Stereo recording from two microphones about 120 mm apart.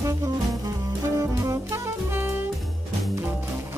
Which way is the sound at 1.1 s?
25° right (ahead or behind).